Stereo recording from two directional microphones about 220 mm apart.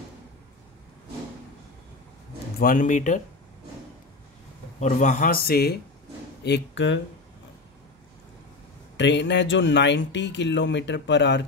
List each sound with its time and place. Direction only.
2.6 s a man's voice: 35° left (ahead or behind)
4.7 s a man's voice: 35° left (ahead or behind); by 7.0 s 55° left (ahead or behind)
8.9 s speech: 55° left (ahead or behind)